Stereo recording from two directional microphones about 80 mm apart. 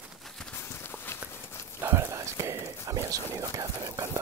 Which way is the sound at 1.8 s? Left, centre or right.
Right.